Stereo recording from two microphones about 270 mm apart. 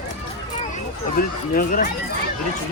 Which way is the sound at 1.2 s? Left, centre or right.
Left.